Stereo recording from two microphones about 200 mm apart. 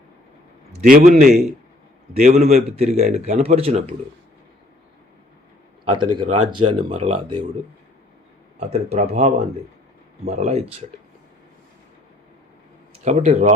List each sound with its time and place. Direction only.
0.7 s a man's voice: 40° right (ahead or behind)
2.1 s a man's voice: 30° right (ahead or behind)
5.9 s speech: 25° right (ahead or behind)
8.5 s a man's voice: 35° right (ahead or behind)
13.1 s a man's voice: 35° right (ahead or behind)